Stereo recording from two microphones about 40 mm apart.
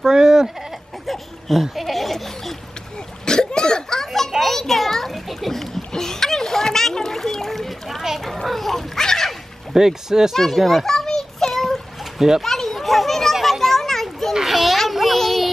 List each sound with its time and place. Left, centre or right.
0.0 s a sound: centre
1.0 s a sound: centre
3.3 s cough: centre
4.4 s children playing: centre
5.9 s splash: centre
8.2 s children playing: centre
9.8 s speech: centre
10.3 s children playing: centre
14.3 s a sound: centre
14.9 s child singing: centre
15.1 s music: centre